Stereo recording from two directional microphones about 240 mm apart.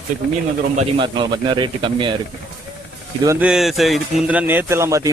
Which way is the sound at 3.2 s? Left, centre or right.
Centre.